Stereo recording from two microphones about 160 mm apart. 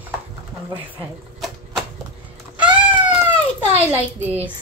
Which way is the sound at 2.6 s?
10° right (ahead or behind).